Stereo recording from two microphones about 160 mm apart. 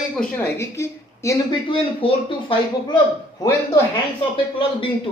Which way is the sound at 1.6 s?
35° left (ahead or behind).